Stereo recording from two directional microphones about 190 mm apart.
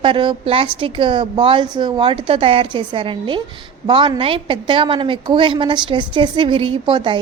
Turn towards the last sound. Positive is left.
turn(degrees=-25)  # may be behind; listen again after turning